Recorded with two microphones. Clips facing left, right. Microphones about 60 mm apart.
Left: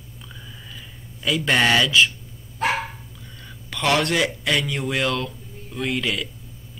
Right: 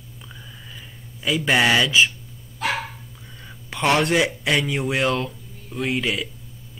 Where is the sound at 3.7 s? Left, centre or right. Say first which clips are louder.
Right 3 dB; centre.